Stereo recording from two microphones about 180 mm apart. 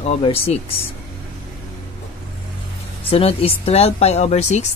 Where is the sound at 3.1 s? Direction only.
35° left (ahead or behind).